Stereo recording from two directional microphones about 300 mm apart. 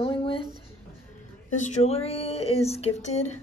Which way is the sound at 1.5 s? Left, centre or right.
Left.